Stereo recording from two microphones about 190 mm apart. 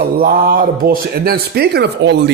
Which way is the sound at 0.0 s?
50° right (ahead or behind).